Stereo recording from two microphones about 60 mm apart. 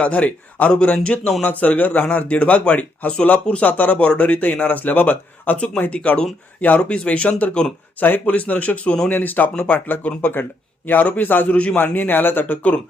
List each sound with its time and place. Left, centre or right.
0.0 s a man's voice: left
5.5 s a man's voice: centre; by 11.4 s left
11.5 s speech: left